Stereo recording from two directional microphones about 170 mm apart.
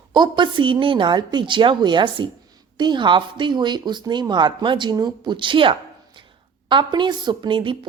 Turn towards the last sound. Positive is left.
turn(degrees=-30)  # may be behind; listen again after turning